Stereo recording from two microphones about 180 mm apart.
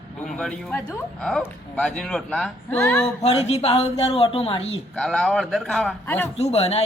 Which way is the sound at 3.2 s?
35° left (ahead or behind).